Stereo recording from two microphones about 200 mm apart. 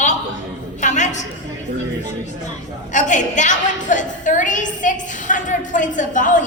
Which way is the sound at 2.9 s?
40° left (ahead or behind).